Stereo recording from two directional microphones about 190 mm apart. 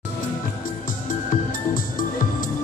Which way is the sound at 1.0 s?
45° left (ahead or behind).